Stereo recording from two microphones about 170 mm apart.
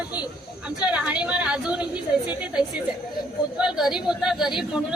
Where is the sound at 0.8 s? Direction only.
5° right (ahead or behind).